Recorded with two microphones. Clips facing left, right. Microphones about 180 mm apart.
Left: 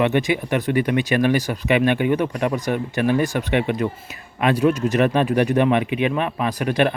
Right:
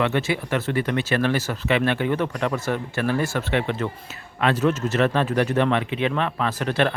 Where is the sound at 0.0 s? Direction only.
15° left (ahead or behind).